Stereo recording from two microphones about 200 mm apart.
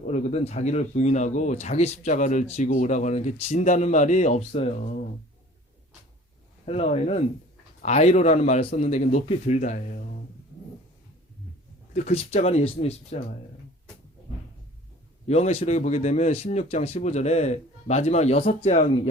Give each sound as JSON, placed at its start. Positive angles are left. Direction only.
{"t": 0.0, "sound": "speech", "side_deg": 35}
{"t": 6.7, "sound": "speech", "side_deg": 30}
{"t": 11.9, "sound": "speech", "side_deg": 30}
{"t": 15.3, "sound": "speech", "side_deg": 35}